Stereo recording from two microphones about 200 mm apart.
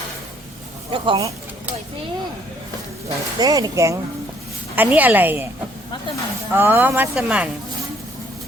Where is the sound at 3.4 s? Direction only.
15° right (ahead or behind).